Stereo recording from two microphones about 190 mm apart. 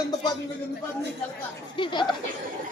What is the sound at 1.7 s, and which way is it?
Speech, 25° left (ahead or behind).